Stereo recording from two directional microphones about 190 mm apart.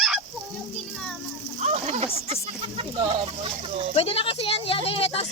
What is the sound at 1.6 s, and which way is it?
Speech, 35° right (ahead or behind).